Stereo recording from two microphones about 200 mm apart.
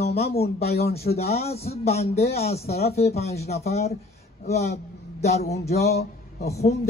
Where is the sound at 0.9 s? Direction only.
30° left (ahead or behind).